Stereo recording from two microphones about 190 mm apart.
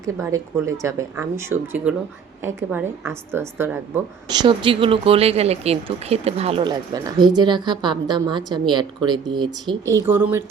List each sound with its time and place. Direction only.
0.0 s speech: 15° right (ahead or behind)
4.3 s speech: 25° right (ahead or behind)